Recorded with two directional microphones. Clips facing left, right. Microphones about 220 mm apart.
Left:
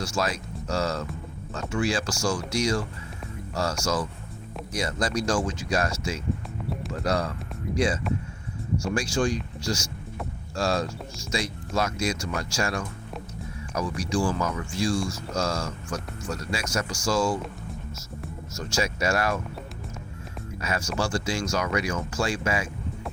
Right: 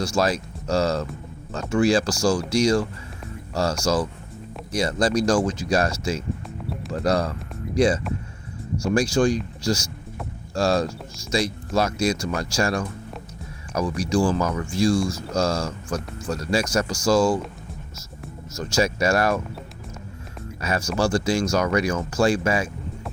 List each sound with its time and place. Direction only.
0.0 s speech: 40° right (ahead or behind)
9.0 s speech: 40° right (ahead or behind)
18.5 s speech: 40° right (ahead or behind)
20.6 s speech: 40° right (ahead or behind)